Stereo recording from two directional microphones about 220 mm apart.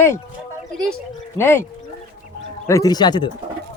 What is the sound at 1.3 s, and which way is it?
Speech, 10° left (ahead or behind).